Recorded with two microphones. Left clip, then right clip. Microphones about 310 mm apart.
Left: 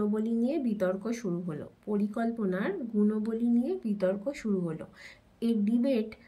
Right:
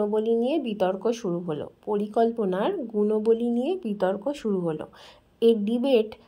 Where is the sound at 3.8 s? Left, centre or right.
Right.